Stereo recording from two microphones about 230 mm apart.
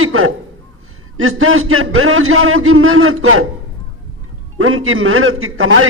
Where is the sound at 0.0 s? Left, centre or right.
Right.